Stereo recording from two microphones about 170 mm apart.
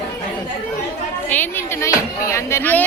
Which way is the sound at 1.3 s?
10° left (ahead or behind).